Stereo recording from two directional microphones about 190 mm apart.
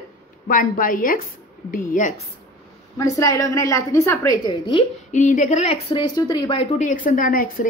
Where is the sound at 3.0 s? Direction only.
15° left (ahead or behind).